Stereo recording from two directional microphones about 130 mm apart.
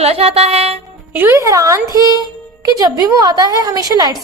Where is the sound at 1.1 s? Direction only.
15° right (ahead or behind).